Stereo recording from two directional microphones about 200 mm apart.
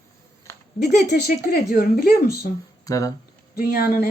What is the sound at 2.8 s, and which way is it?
Speech, 15° left (ahead or behind).